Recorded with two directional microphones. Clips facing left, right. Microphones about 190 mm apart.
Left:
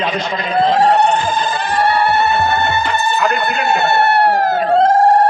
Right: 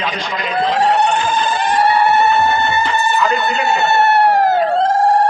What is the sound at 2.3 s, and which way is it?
Music, 60° left (ahead or behind).